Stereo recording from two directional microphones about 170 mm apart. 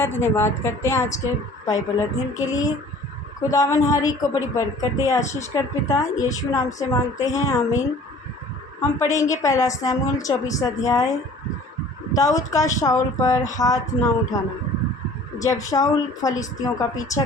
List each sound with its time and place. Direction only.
0.0 s a woman's voice: 15° left (ahead or behind)
12.1 s a woman's voice: 20° left (ahead or behind)
15.4 s a woman's voice: 20° left (ahead or behind)